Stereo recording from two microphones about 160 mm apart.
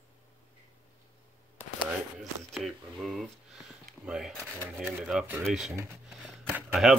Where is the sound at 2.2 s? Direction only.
Centre (ahead or behind).